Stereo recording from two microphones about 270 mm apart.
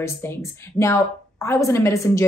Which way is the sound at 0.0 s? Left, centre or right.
Centre.